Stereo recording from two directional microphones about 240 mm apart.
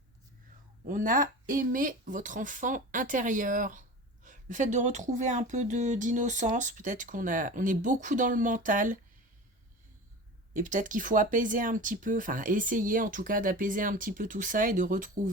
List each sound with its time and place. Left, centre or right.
0.9 s speech: right
10.5 s speech: right